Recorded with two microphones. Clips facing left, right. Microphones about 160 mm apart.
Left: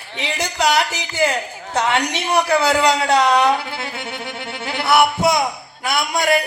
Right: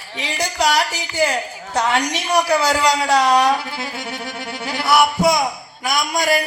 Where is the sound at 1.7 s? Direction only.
25° left (ahead or behind).